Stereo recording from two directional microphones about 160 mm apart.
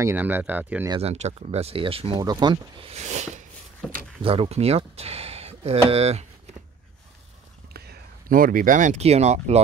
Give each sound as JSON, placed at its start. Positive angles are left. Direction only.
{"t": 0.0, "sound": "speech", "side_deg": -10}
{"t": 1.0, "sound": "speech", "side_deg": -45}
{"t": 2.9, "sound": "a sound", "side_deg": -45}
{"t": 4.2, "sound": "speech", "side_deg": -35}
{"t": 7.7, "sound": "speech", "side_deg": -80}